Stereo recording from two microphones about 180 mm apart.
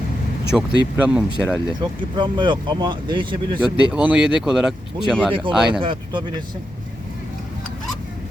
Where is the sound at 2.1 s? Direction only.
25° right (ahead or behind).